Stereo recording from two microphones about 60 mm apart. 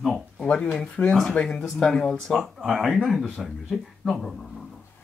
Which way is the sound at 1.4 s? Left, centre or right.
Centre.